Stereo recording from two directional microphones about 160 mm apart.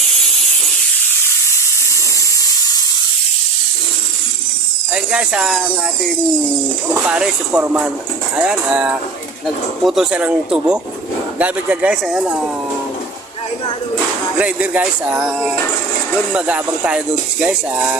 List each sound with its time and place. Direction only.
4.9 s speech: 5° right (ahead or behind)
6.9 s speech: 5° right (ahead or behind)
14.3 s speech: 10° right (ahead or behind)